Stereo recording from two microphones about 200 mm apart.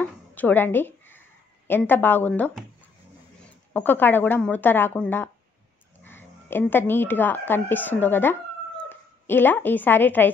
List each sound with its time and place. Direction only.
0.0 s a sound: 10° left (ahead or behind)
1.9 s speech: 10° left (ahead or behind)
3.7 s speech: 10° left (ahead or behind)